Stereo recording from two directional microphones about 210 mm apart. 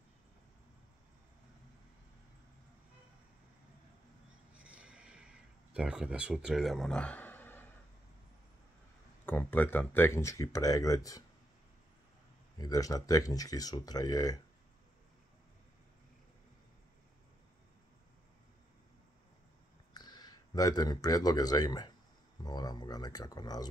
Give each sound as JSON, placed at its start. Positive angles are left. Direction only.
{"t": 4.6, "sound": "a sound", "side_deg": -5}
{"t": 9.2, "sound": "speech", "side_deg": 5}
{"t": 12.5, "sound": "speech", "side_deg": 15}
{"t": 19.9, "sound": "speech", "side_deg": 20}